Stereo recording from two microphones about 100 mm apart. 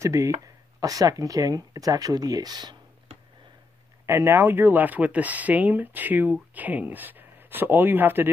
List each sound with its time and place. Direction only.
0.0 s speech: 30° right (ahead or behind)
4.0 s speech: 25° right (ahead or behind)